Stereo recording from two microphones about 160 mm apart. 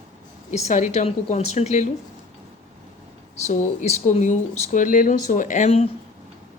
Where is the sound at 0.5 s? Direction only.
45° left (ahead or behind).